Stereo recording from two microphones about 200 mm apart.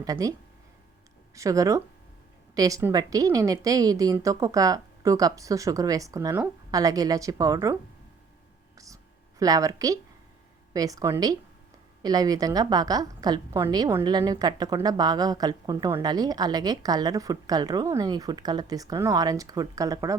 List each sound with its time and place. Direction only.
0.0 s a woman's voice: 15° right (ahead or behind)
1.4 s a woman's voice: 15° right (ahead or behind)
9.4 s a woman's voice: 15° right (ahead or behind)